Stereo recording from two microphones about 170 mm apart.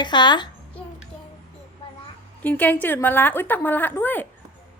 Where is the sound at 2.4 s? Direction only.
10° left (ahead or behind).